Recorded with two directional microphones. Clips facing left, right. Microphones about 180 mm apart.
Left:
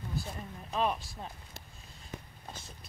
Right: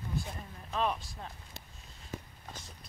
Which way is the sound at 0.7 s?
10° left (ahead or behind).